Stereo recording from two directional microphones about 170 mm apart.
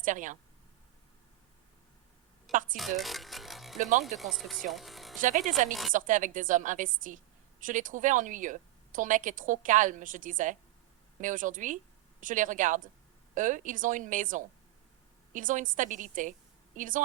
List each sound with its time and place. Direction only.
0.0 s a woman's voice: 50° right (ahead or behind)
2.7 s music: centre (ahead or behind)
3.8 s a woman's voice: 45° right (ahead or behind)
4.2 s speech: centre (ahead or behind)
4.7 s music: centre (ahead or behind)
5.5 s a woman's voice: 50° right (ahead or behind)